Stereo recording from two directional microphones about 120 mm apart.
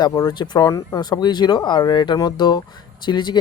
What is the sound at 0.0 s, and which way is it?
Speech, 35° left (ahead or behind).